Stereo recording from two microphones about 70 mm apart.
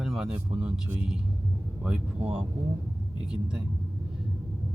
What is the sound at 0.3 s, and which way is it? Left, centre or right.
Speech, centre.